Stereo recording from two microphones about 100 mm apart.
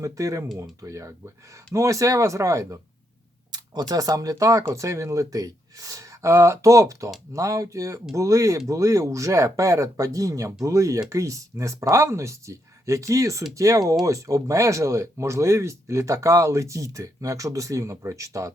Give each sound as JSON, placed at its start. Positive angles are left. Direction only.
{"t": 0.0, "sound": "speech", "side_deg": -35}